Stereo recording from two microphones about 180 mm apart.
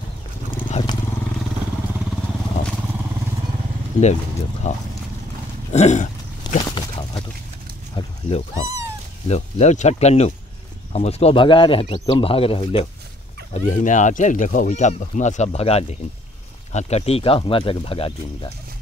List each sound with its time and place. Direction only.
0.7 s wild animals: 30° left (ahead or behind)
3.9 s speech: 40° left (ahead or behind)
6.7 s a sound: 25° left (ahead or behind)
9.3 s speech: 40° left (ahead or behind)
13.5 s speech: 45° left (ahead or behind)